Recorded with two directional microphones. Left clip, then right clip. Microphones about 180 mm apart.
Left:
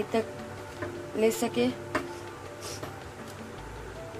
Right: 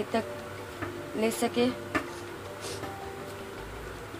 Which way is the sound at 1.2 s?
10° left (ahead or behind).